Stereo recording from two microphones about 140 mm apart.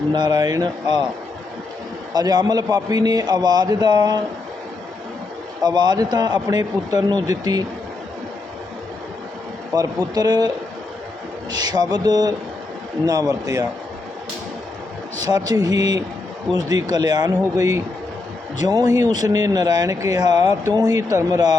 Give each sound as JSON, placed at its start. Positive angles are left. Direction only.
{"t": 0.1, "sound": "speech", "side_deg": -30}
{"t": 2.1, "sound": "speech", "side_deg": -30}
{"t": 5.6, "sound": "speech", "side_deg": -30}
{"t": 9.7, "sound": "speech", "side_deg": -25}
{"t": 11.5, "sound": "speech", "side_deg": -30}
{"t": 15.2, "sound": "speech", "side_deg": -25}